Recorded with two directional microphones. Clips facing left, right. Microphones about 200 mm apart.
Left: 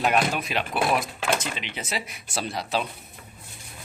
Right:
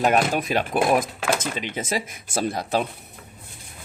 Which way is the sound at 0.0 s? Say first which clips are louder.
Right 3 dB; 45° right (ahead or behind).